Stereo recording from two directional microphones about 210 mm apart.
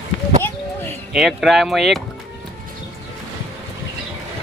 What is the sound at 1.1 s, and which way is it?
Speech, centre (ahead or behind).